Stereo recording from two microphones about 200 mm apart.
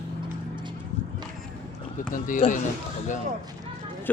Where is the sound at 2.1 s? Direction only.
40° left (ahead or behind).